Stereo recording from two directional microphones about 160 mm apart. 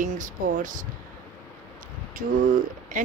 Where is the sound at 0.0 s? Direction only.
55° right (ahead or behind).